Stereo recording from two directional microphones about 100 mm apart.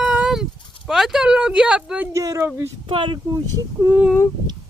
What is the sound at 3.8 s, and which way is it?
Speech, 20° right (ahead or behind).